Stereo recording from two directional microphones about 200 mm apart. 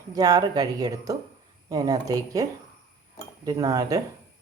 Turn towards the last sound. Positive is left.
turn(degrees=-20)  # may be behind; listen again after turning